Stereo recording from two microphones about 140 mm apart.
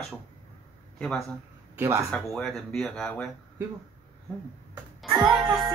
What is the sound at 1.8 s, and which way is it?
Speech, 20° right (ahead or behind).